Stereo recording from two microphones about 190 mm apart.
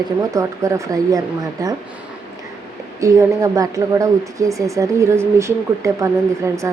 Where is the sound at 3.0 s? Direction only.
15° right (ahead or behind).